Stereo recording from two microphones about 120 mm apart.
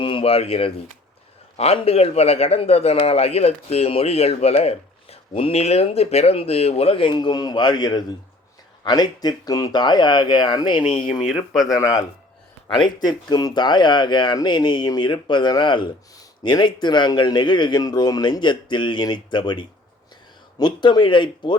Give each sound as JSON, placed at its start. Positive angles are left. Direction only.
{"t": 0.0, "sound": "a man's voice", "side_deg": 50}
{"t": 11.1, "sound": "speech", "side_deg": 0}
{"t": 11.8, "sound": "speech", "side_deg": 30}